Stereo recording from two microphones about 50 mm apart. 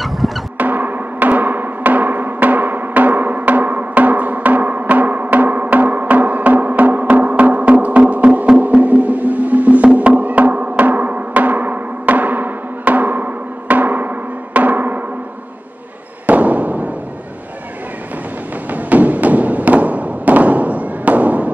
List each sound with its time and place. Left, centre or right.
0.2 s music: centre
0.6 s music: right
16.3 s a sound: right
18.7 s thump: right